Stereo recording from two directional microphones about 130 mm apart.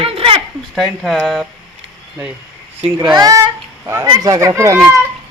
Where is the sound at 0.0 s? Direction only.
45° right (ahead or behind).